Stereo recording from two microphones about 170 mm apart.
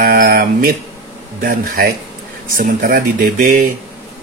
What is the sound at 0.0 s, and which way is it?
Mantra, 60° right (ahead or behind).